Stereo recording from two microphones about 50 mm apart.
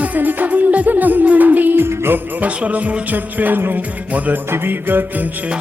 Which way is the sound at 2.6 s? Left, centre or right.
Right.